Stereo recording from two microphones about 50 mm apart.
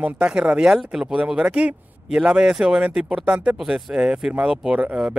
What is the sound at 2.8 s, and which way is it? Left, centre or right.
Speech, right.